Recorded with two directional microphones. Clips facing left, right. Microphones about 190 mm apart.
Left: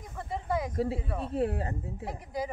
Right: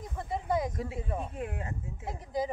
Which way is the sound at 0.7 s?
30° left (ahead or behind).